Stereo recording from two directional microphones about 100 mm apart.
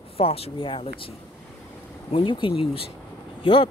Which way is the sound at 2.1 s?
55° left (ahead or behind).